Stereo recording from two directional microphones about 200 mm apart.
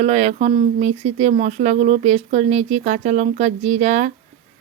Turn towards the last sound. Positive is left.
turn(degrees=-35)  # may be behind; listen again after turning